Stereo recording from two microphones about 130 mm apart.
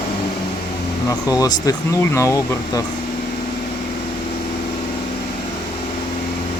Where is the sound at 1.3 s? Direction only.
30° left (ahead or behind).